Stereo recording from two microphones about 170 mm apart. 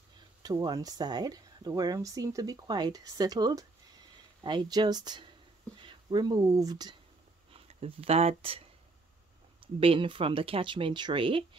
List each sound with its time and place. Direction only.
0.4 s speech: 25° right (ahead or behind)
7.5 s speech: 35° right (ahead or behind)
9.8 s speech: 30° right (ahead or behind)